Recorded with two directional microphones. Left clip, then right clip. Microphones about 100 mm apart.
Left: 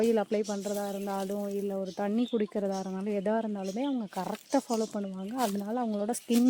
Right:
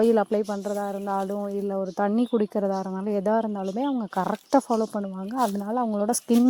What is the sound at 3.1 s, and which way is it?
Speech, 35° right (ahead or behind).